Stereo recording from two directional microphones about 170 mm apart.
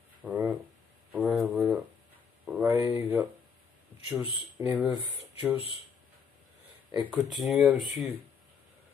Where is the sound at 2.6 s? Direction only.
10° right (ahead or behind).